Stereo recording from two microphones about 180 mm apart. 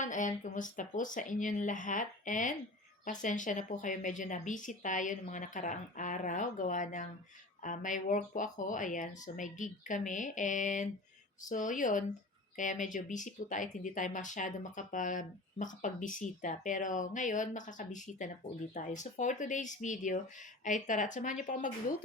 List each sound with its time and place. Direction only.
0.0 s speech: 45° left (ahead or behind)